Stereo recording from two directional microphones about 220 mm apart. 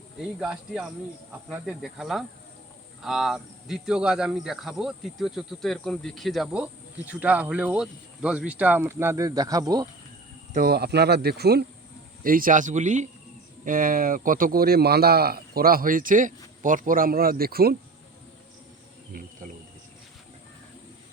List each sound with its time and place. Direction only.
0.2 s speech: centre (ahead or behind)
10.5 s speech: 45° right (ahead or behind)